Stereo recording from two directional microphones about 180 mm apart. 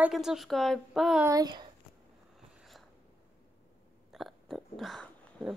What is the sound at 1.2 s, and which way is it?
Speech, 20° right (ahead or behind).